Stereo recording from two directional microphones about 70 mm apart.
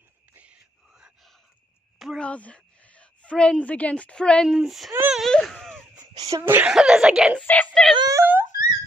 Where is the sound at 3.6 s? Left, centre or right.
Centre.